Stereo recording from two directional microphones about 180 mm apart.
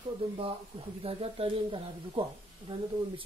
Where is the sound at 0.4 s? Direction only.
30° right (ahead or behind).